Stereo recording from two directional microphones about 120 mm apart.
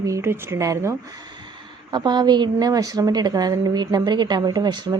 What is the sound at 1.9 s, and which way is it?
A woman's voice, 40° right (ahead or behind).